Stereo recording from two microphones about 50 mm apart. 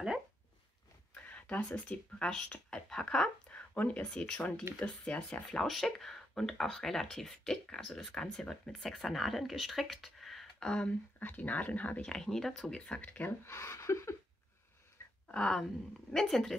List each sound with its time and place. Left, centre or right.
1.2 s speech: left
2.2 s speech: centre
3.5 s speech: left
5.6 s speech: centre
10.7 s speech: left
11.1 s speech: left
12.0 s speech: centre
12.7 s speech: centre
13.0 s speech: left
13.3 s speech: left
15.0 s a sound: left
15.3 s speech: centre